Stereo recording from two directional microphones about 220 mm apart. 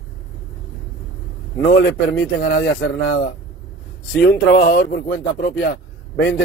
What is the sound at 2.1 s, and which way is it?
Speech, 45° left (ahead or behind).